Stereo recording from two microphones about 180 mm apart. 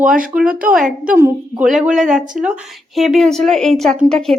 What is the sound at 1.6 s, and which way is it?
A woman's voice, 5° right (ahead or behind).